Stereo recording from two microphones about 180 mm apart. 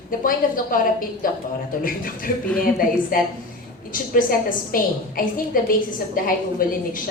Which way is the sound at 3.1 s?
50° left (ahead or behind).